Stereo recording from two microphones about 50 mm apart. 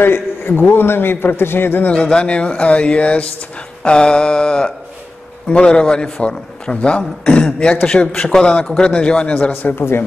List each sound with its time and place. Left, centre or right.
0.0 s a man's voice: left
1.8 s a man's voice: left
9.5 s a man's voice: left